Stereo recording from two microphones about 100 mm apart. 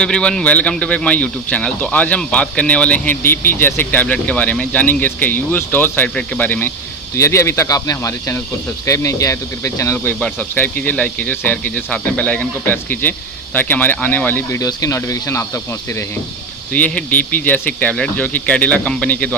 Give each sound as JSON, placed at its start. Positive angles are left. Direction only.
{"t": 0.0, "sound": "speech", "side_deg": 10}
{"t": 14.6, "sound": "speech", "side_deg": 35}
{"t": 16.7, "sound": "speech", "side_deg": 15}